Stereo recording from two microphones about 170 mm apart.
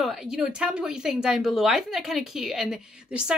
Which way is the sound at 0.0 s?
Centre (ahead or behind).